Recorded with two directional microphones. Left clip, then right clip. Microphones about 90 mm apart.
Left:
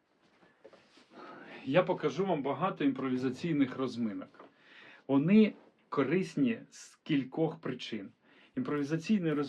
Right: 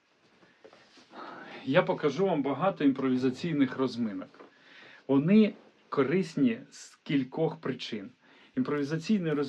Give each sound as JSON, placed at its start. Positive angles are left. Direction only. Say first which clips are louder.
{"t": 1.1, "sound": "speech", "louder": "right 5 dB", "side_deg": -45}